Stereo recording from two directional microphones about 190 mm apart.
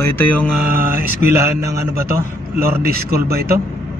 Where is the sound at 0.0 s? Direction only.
10° left (ahead or behind).